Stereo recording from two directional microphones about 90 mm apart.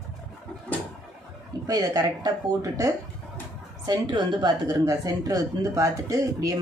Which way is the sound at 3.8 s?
45° right (ahead or behind).